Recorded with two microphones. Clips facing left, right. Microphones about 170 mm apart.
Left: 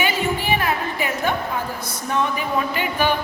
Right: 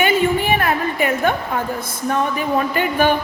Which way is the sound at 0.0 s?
55° right (ahead or behind).